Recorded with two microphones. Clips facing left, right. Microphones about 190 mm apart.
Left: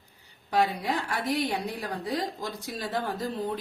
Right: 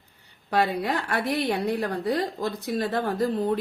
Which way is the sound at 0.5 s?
60° right (ahead or behind).